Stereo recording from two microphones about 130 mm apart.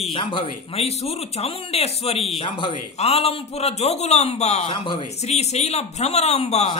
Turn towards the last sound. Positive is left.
turn(degrees=55)  # may be behind; listen again after turning